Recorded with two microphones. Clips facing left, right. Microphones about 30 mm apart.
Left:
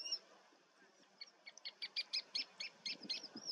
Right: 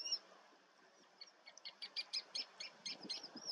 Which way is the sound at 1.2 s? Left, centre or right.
Centre.